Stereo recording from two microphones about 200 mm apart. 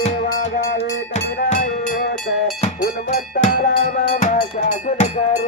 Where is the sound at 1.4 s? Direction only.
40° left (ahead or behind).